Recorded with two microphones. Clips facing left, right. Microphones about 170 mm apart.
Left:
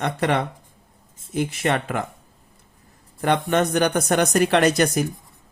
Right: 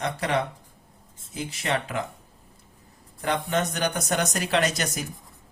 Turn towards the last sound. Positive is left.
turn(degrees=55)  # may be behind; listen again after turning